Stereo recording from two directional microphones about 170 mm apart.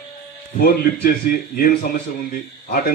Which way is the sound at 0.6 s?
60° left (ahead or behind).